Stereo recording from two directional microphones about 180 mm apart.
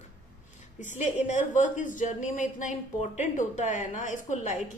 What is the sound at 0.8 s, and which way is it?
A woman's voice, 40° left (ahead or behind).